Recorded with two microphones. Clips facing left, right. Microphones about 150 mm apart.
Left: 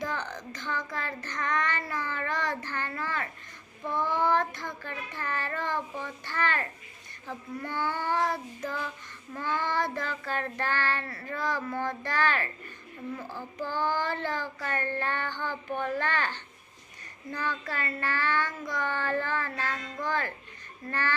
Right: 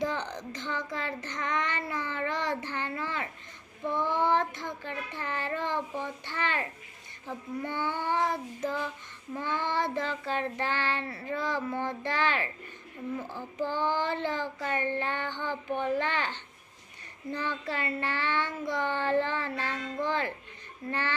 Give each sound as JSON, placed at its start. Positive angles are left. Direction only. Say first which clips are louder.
{"t": 0.0, "sound": "child singing", "louder": "right 2 dB", "side_deg": -25}